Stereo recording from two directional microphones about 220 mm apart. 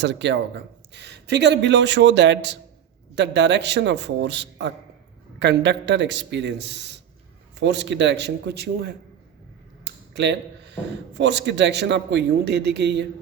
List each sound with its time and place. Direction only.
0.0 s speech: 55° right (ahead or behind)